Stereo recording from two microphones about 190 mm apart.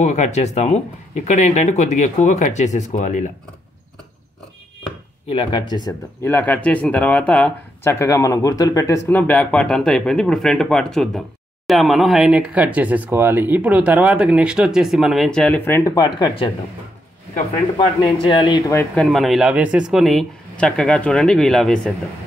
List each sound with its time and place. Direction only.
0.0 s speech: 35° left (ahead or behind)
5.3 s speech: 25° left (ahead or behind)
6.2 s speech: 10° left (ahead or behind)
17.7 s speech: 25° left (ahead or behind)
18.8 s speech: 5° left (ahead or behind)